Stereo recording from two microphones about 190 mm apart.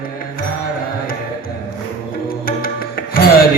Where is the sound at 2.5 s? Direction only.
50° left (ahead or behind).